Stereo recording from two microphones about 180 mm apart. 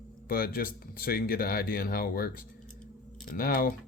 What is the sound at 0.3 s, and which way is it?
Speech, 55° left (ahead or behind).